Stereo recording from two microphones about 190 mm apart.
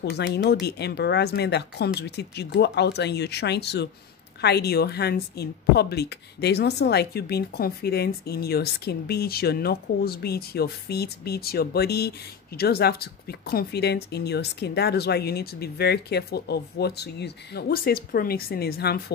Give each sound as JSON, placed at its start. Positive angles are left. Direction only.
{"t": 0.0, "sound": "speech", "side_deg": 60}